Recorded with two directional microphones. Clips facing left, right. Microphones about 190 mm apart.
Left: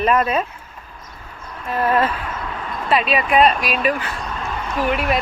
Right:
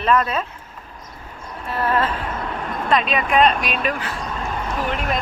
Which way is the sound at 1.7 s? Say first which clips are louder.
Left 3 dB; 15° left (ahead or behind).